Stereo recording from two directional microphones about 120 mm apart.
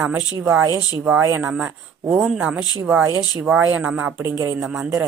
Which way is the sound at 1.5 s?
15° right (ahead or behind).